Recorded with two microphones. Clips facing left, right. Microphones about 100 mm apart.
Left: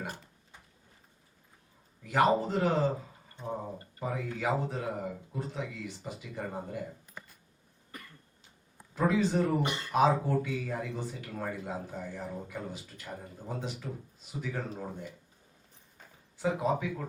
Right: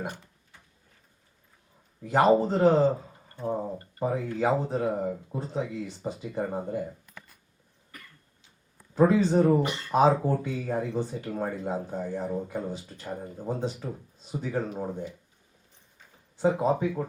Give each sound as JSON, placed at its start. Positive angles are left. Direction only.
{"t": 2.0, "sound": "speech", "side_deg": -30}
{"t": 4.0, "sound": "speech", "side_deg": -30}
{"t": 9.0, "sound": "speech", "side_deg": -30}
{"t": 16.4, "sound": "speech", "side_deg": -30}